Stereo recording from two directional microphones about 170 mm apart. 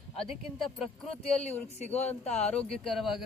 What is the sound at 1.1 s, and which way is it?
Speech, 40° left (ahead or behind).